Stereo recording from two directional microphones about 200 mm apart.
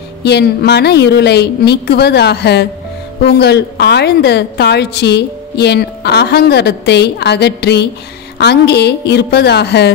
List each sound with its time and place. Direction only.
0.2 s a woman's voice: 55° left (ahead or behind)